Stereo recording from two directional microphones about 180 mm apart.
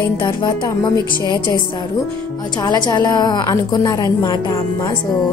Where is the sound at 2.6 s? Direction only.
25° left (ahead or behind).